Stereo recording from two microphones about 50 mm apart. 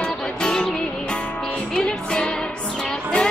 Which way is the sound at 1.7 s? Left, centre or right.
Centre.